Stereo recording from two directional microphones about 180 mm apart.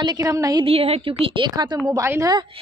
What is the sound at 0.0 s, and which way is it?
A woman's voice, 20° right (ahead or behind).